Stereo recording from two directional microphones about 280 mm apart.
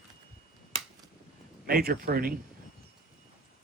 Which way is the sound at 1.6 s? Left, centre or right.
Right.